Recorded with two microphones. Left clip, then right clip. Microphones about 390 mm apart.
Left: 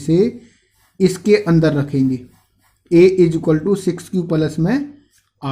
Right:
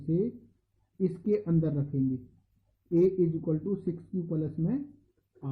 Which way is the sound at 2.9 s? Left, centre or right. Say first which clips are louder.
Left 15 dB; centre.